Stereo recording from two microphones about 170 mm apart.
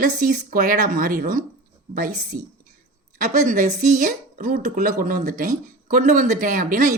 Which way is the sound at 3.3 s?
45° right (ahead or behind).